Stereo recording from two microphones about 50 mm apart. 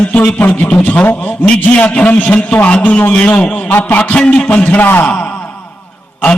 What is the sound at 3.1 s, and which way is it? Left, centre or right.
Speech, centre.